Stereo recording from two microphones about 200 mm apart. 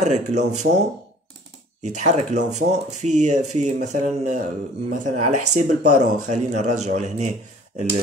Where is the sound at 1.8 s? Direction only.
35° right (ahead or behind).